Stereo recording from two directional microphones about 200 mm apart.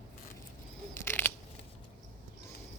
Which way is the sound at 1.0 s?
10° left (ahead or behind).